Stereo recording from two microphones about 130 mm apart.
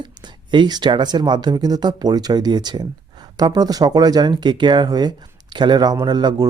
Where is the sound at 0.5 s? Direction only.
35° right (ahead or behind).